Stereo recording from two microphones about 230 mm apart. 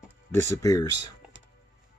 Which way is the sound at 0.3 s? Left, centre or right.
Centre.